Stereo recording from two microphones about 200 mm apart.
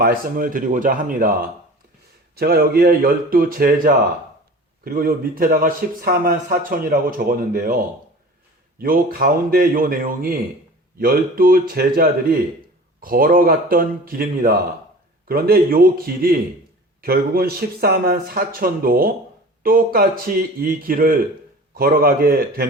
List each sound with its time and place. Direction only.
0.0 s a man's voice: 45° right (ahead or behind)